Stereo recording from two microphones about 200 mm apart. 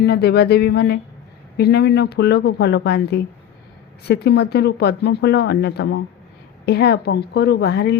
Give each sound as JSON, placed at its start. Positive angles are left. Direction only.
{"t": 0.0, "sound": "speech", "side_deg": 55}